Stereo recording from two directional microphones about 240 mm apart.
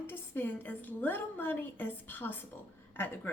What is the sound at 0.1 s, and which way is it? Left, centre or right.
A woman's voice, centre.